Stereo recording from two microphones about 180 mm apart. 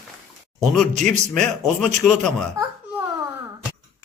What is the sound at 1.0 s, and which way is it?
Speech, 5° left (ahead or behind).